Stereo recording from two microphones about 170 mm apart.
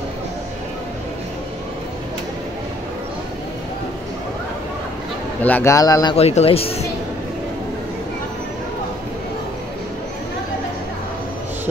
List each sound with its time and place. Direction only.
5.4 s speech: 10° left (ahead or behind)
6.1 s speech: 35° left (ahead or behind)